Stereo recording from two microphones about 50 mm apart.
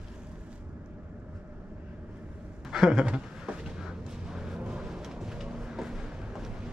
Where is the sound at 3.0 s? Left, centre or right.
Right.